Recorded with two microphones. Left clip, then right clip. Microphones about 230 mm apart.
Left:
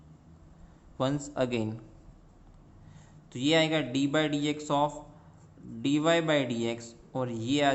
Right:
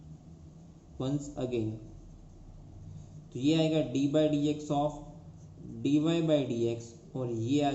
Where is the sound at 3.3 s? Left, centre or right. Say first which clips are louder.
Left 3 dB; left.